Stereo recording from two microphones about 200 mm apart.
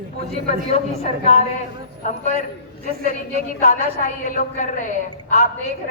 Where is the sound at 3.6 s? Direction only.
40° left (ahead or behind).